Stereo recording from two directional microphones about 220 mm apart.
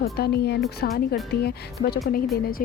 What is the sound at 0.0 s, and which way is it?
Speech, 45° left (ahead or behind).